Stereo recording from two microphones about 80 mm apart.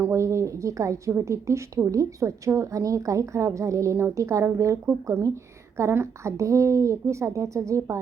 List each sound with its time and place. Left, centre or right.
0.1 s a woman's voice: right